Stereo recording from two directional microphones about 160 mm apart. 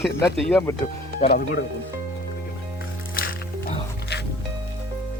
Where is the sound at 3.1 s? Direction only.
65° left (ahead or behind).